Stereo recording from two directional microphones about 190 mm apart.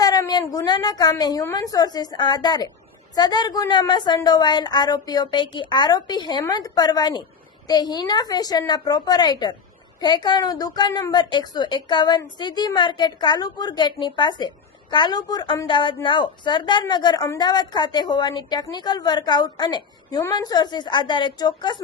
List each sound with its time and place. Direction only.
0.0 s a woman's voice: 20° left (ahead or behind)